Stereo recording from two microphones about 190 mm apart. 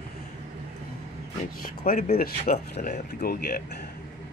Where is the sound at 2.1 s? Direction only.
50° left (ahead or behind).